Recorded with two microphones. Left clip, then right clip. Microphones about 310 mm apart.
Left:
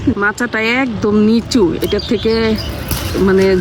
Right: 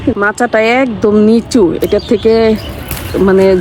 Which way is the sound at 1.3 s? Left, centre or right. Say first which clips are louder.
Right 4 dB; centre.